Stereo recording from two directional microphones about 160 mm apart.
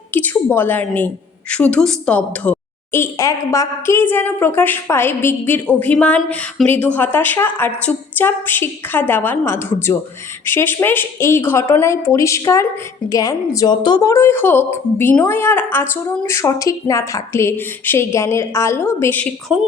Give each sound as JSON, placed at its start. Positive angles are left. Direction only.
{"t": 0.1, "sound": "a woman's voice", "side_deg": 10}
{"t": 19.5, "sound": "speech", "side_deg": -5}